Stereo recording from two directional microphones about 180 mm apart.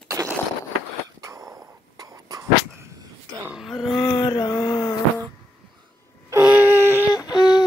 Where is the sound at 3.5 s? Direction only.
Centre (ahead or behind).